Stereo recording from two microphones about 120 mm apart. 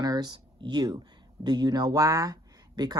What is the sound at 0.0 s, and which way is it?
Speech, 35° right (ahead or behind).